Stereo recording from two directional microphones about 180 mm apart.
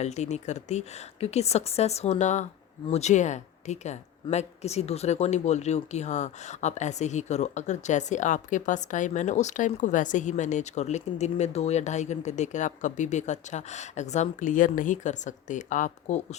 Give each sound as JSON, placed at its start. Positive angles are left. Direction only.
{"t": 0.0, "sound": "speech", "side_deg": 40}